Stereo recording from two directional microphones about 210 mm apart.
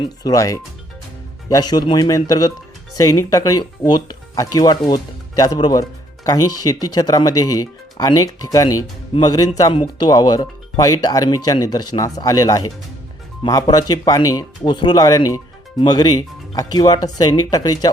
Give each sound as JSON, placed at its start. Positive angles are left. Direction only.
{"t": 0.0, "sound": "speech", "side_deg": 15}